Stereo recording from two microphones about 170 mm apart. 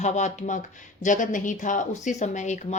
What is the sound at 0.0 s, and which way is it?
Speech, 45° left (ahead or behind).